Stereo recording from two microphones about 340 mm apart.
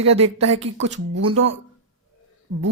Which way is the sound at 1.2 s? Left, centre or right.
Right.